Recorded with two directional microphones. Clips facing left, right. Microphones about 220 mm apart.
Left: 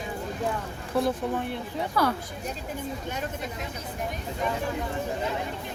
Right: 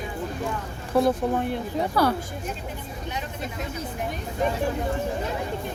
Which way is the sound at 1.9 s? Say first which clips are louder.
Right 3 dB; 30° right (ahead or behind).